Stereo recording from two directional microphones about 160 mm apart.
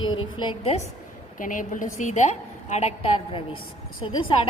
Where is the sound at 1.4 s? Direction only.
55° left (ahead or behind).